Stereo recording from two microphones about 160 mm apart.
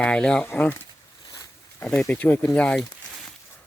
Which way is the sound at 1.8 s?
10° left (ahead or behind).